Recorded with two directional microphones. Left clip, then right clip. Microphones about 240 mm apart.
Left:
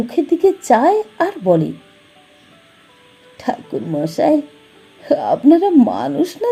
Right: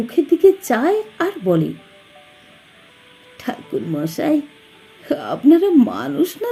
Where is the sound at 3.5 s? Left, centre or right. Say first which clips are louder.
Left 3 dB; centre.